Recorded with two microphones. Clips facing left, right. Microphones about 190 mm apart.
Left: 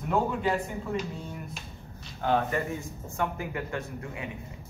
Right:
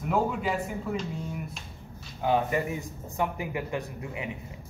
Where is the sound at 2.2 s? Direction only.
15° right (ahead or behind).